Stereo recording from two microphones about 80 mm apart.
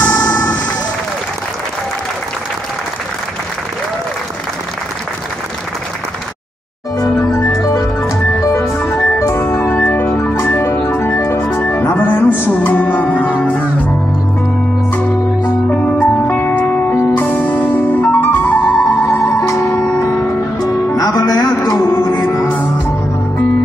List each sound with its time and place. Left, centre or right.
0.0 s emergency vehicle: centre
7.3 s music: left
9.8 s organ: left
11.5 s music: left
20.1 s music: left
20.6 s music: left